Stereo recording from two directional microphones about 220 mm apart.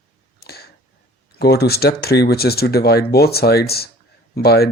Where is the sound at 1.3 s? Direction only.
45° left (ahead or behind).